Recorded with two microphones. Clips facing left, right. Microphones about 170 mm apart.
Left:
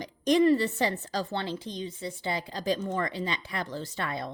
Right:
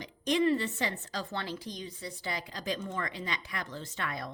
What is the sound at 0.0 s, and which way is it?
A woman's voice, 40° left (ahead or behind).